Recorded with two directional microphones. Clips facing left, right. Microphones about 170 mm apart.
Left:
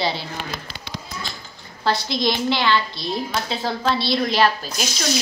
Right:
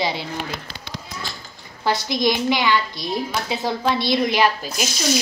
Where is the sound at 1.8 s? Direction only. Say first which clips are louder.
Right 1 dB; 15° right (ahead or behind).